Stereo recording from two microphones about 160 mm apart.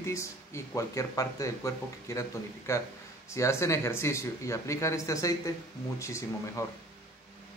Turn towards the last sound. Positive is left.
turn(degrees=20)  # may be behind; listen again after turning